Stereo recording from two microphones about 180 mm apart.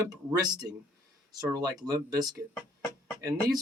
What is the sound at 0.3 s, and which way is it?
Speech, 20° right (ahead or behind).